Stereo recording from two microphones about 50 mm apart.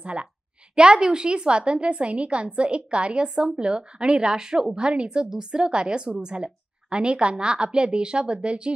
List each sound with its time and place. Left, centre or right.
0.0 s a woman's voice: right